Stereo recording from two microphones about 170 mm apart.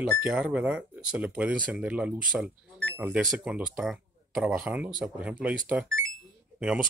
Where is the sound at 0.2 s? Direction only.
10° right (ahead or behind).